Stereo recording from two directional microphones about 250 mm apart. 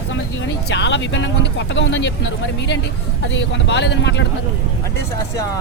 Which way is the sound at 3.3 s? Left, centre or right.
Left.